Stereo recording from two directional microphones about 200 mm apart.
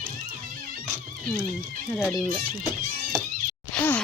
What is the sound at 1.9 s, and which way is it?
Speech, 5° left (ahead or behind).